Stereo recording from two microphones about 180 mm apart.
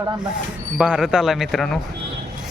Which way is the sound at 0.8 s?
5° right (ahead or behind).